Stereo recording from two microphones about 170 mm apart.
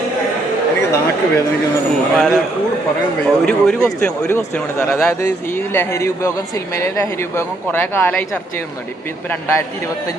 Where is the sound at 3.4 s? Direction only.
5° left (ahead or behind).